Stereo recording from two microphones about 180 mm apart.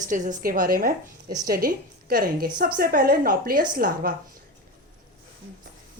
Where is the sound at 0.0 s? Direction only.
45° right (ahead or behind).